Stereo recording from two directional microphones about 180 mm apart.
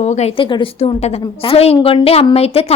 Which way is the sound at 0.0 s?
40° left (ahead or behind).